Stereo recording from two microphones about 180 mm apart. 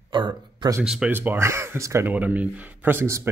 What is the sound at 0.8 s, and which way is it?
Speech, 5° right (ahead or behind).